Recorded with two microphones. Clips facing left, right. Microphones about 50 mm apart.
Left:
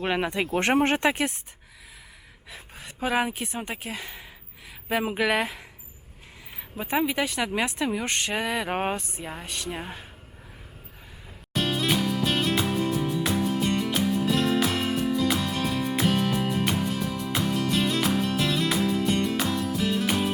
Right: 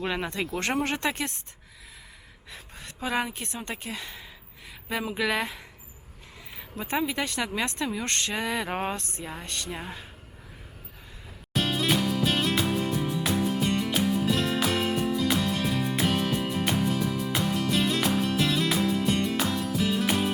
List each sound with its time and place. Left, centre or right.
0.1 s speech: centre
0.4 s speech: left
0.9 s speech: centre
2.5 s a woman's voice: centre
5.2 s a woman's voice: centre
6.7 s speech: centre
8.8 s speech: centre
9.0 s a woman's voice: centre
11.5 s music: centre